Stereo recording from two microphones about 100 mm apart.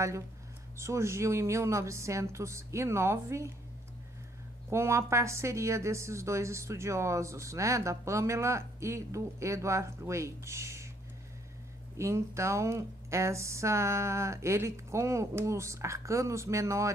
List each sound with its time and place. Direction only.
0.7 s a woman's voice: 25° right (ahead or behind)
4.6 s a woman's voice: 25° right (ahead or behind)
12.0 s a woman's voice: 30° right (ahead or behind)